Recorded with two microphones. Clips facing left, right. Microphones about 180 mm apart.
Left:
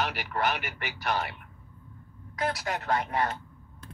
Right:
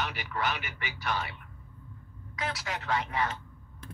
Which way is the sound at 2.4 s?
50° left (ahead or behind).